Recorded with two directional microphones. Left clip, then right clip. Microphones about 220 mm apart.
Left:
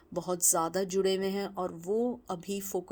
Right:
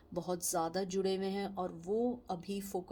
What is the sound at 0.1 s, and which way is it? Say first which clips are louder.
Speech: left 6 dB; 35° left (ahead or behind).